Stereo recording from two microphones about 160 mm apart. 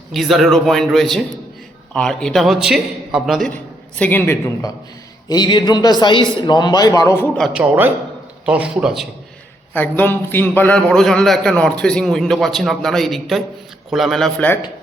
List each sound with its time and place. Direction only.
0.1 s a man's voice: centre (ahead or behind)
3.9 s a woman's voice: 10° left (ahead or behind)
5.3 s a man's voice: 25° left (ahead or behind)
7.3 s a man's voice: centre (ahead or behind)
9.7 s a man's voice: 10° left (ahead or behind)